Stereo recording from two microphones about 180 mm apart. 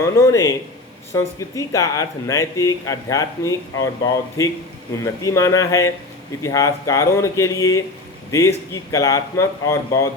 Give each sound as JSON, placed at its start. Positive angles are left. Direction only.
{"t": 0.0, "sound": "speech", "side_deg": 15}